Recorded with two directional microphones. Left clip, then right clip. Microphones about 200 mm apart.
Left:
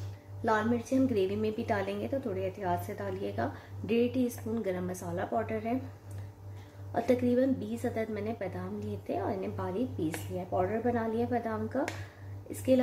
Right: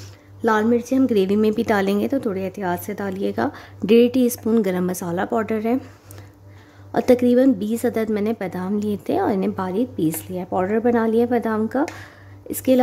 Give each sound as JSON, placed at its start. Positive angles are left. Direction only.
{"t": 0.5, "sound": "a woman's voice", "side_deg": -55}
{"t": 6.9, "sound": "a woman's voice", "side_deg": -55}